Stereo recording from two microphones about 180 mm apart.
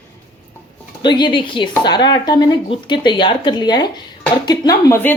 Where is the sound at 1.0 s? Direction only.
25° left (ahead or behind).